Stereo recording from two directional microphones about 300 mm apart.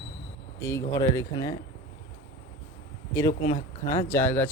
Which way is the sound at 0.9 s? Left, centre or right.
Centre.